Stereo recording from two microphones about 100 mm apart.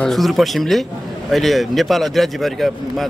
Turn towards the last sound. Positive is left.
turn(degrees=0)  # may be behind; listen again after turning